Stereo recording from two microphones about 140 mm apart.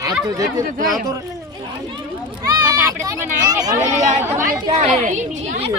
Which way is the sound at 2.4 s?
25° right (ahead or behind).